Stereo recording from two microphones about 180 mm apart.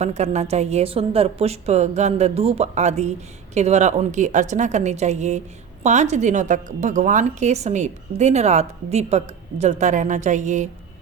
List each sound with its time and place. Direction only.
0.0 s a woman's voice: 40° right (ahead or behind)